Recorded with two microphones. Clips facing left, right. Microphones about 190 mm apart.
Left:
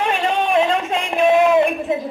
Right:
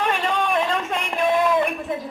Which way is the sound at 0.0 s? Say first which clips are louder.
Left 3 dB; 25° left (ahead or behind).